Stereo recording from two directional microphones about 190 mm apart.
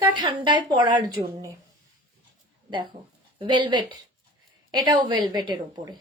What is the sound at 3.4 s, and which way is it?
A woman's voice, 25° right (ahead or behind).